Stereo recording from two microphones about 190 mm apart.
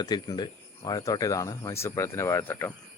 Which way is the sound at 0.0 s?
20° left (ahead or behind).